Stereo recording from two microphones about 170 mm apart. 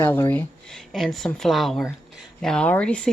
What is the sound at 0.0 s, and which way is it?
A woman's voice, 15° left (ahead or behind).